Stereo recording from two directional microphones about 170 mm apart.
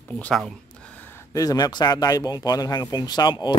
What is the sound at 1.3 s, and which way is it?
Speech, 20° left (ahead or behind).